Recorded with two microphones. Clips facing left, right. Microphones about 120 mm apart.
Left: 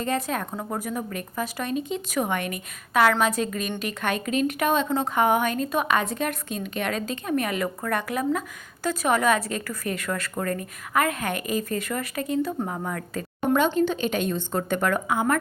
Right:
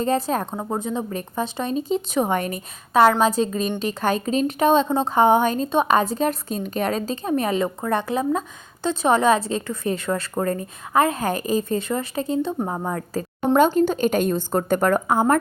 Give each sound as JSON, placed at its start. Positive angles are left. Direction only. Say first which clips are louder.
{"t": 0.0, "sound": "a woman's voice", "louder": "right 5 dB", "side_deg": -35}